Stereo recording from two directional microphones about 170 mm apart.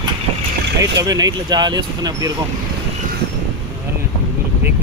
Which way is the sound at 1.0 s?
20° right (ahead or behind).